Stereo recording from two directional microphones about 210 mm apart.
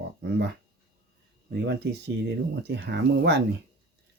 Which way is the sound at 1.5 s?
50° right (ahead or behind).